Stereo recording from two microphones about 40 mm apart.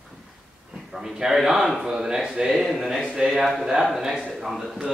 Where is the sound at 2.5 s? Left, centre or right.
Centre.